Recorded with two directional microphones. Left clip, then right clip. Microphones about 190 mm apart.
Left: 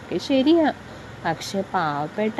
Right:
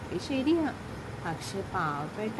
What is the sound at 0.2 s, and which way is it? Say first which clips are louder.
A woman's voice: left 10 dB; 40° left (ahead or behind).